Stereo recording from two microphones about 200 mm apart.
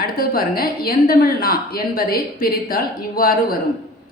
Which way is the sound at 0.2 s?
50° left (ahead or behind).